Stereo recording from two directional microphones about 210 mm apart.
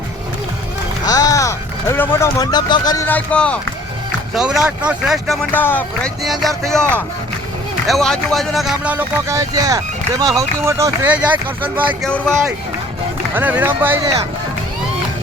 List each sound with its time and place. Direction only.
1.0 s speech: 20° left (ahead or behind); by 6.6 s centre (ahead or behind)
7.9 s speech: centre (ahead or behind)
11.9 s speech: 5° left (ahead or behind)
13.3 s speech: 10° right (ahead or behind)